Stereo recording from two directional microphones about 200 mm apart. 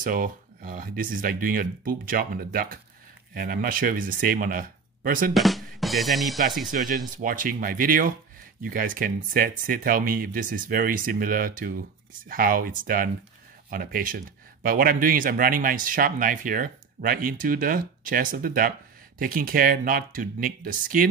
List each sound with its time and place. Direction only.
0.0 s speech: 45° right (ahead or behind)
5.3 s drum: centre (ahead or behind)
6.7 s speech: 45° right (ahead or behind)